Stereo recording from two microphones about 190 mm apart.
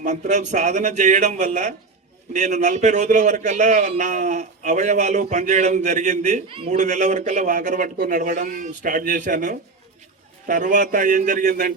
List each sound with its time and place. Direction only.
0.0 s a man's voice: 40° right (ahead or behind)